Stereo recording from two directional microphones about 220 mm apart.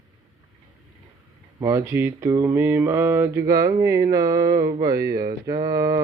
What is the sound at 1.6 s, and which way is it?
Mantra, 15° right (ahead or behind).